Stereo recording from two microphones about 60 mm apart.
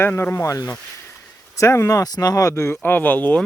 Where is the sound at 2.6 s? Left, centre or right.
Left.